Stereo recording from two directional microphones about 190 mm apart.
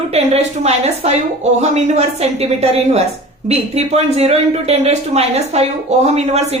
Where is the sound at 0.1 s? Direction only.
35° right (ahead or behind).